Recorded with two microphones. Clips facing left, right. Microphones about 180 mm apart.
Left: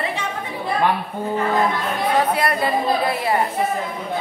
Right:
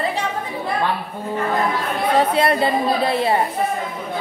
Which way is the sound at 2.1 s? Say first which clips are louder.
Right 4 dB; 25° right (ahead or behind).